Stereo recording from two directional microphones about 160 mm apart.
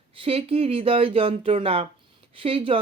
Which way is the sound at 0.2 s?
35° right (ahead or behind).